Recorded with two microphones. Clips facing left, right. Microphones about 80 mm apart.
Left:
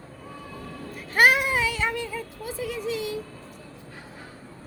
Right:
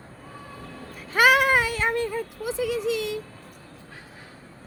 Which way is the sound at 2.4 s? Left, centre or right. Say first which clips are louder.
Right 5 dB; right.